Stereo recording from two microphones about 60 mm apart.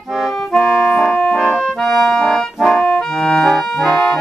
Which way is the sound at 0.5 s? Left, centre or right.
Centre.